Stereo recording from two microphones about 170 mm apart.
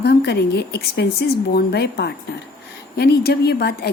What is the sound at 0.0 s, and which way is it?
A woman's voice, 80° left.